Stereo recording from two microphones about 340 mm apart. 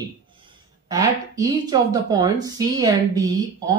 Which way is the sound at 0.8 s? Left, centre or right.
Centre.